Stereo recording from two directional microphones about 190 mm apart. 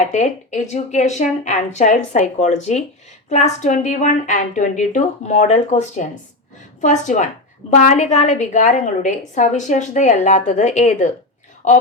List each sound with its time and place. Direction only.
0.0 s a woman's voice: 40° left (ahead or behind)